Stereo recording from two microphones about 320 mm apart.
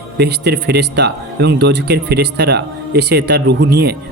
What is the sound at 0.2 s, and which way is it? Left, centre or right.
Speech, right.